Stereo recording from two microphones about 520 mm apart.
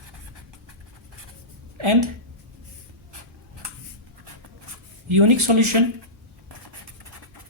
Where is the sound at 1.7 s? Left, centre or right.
Right.